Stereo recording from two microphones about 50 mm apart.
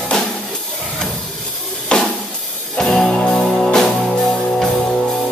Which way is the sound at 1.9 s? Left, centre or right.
Centre.